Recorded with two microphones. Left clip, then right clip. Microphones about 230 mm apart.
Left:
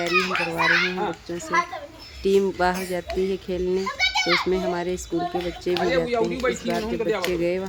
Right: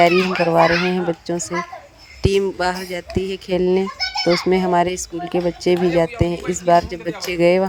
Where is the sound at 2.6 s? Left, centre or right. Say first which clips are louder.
Right 2 dB; right.